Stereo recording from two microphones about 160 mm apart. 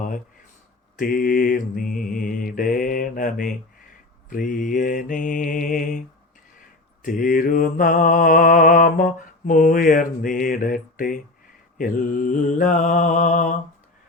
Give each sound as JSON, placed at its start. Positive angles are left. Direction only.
{"t": 0.9, "sound": "mantra", "side_deg": 60}
{"t": 7.0, "sound": "mantra", "side_deg": 60}